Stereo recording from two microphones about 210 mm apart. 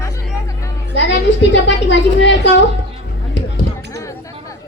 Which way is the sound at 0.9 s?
55° left (ahead or behind).